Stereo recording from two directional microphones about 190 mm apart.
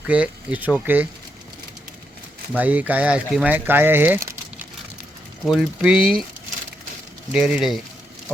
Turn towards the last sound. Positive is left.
turn(degrees=0)  # may be behind; listen again after turning